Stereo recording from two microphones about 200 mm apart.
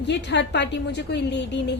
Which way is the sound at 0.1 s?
60° left (ahead or behind).